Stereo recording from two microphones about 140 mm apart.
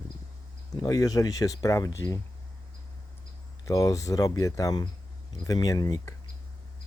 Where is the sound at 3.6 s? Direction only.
25° left (ahead or behind).